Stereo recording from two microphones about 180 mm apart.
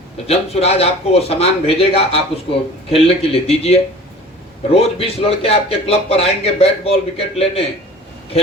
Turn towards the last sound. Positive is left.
turn(degrees=35)  # may be behind; listen again after turning